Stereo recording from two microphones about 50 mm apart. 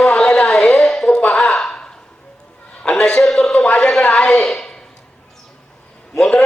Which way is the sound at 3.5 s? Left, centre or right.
Left.